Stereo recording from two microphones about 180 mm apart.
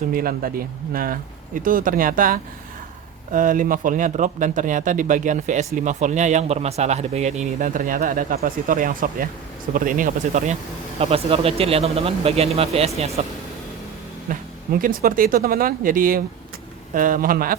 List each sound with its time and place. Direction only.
0.1 s speech: 55° right (ahead or behind)